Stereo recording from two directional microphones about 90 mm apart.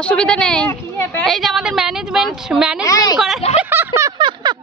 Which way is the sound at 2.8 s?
40° left (ahead or behind).